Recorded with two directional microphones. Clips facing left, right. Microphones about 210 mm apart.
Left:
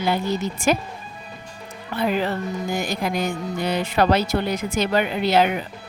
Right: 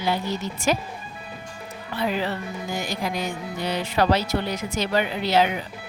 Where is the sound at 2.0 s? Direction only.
55° left (ahead or behind).